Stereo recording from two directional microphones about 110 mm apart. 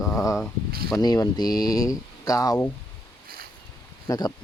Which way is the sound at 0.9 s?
35° left (ahead or behind).